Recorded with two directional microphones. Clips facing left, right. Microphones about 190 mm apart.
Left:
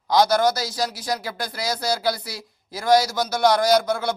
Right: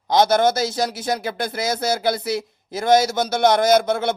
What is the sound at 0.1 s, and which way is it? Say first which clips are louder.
A man's voice: right 2 dB; 25° right (ahead or behind).